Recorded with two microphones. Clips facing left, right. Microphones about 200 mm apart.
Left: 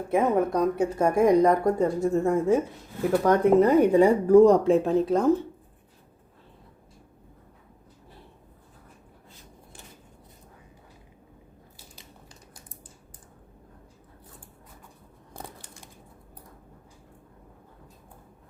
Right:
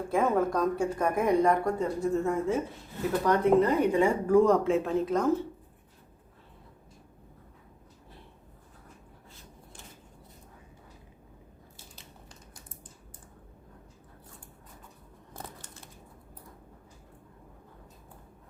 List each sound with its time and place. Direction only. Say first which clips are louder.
0.1 s speech: left 3 dB; 20° left (ahead or behind)
15.3 s crumpling: left 2 dB; 15° left (ahead or behind)